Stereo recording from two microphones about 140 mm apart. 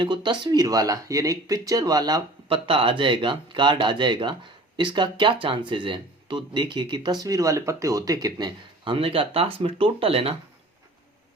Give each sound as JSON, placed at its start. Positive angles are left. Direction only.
{"t": 0.0, "sound": "speech", "side_deg": -35}